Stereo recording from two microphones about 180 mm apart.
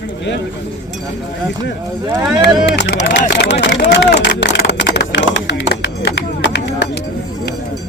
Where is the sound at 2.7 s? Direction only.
80° left.